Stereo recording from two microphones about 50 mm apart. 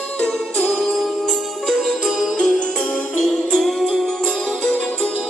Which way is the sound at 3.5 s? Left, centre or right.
Centre.